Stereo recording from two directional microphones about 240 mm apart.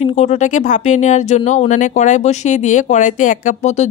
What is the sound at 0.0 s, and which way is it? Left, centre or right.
A woman's voice, left.